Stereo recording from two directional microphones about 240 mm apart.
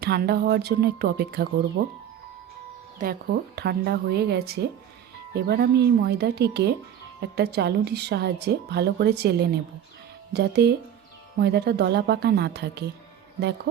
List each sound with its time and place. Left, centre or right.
0.0 s speech: right
3.0 s a woman's voice: right